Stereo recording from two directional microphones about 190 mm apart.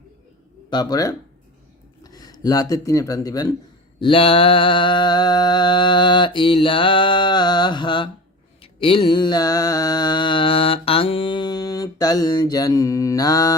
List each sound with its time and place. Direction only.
0.7 s music: 20° left (ahead or behind)
2.0 s speech: 20° left (ahead or behind)
4.0 s music: 30° left (ahead or behind)